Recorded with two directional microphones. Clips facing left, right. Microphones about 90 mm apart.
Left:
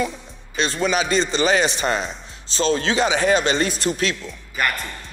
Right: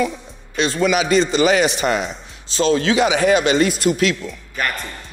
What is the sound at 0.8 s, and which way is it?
A man's voice, 35° left (ahead or behind).